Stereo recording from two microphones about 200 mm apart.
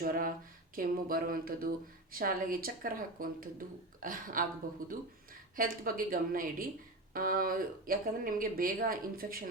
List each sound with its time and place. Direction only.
0.0 s speech: 45° right (ahead or behind)